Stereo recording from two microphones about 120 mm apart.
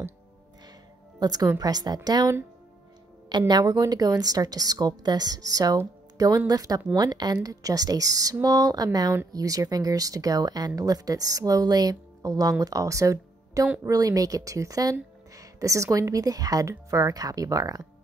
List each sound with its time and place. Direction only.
1.2 s a woman's voice: 35° right (ahead or behind)